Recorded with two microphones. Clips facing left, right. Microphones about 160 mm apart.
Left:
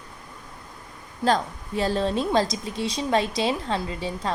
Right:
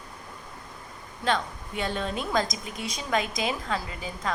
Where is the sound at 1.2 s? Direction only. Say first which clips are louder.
Left 5 dB; 35° left (ahead or behind).